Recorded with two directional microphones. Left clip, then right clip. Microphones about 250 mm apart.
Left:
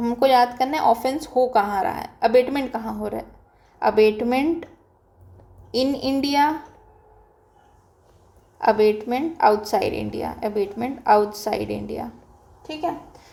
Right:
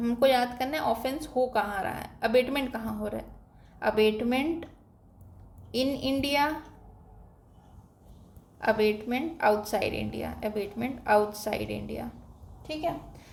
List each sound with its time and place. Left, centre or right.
0.0 s a woman's voice: centre
5.7 s a woman's voice: centre
8.6 s a woman's voice: centre